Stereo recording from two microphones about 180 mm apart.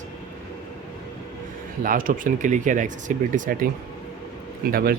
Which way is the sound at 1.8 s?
50° right (ahead or behind).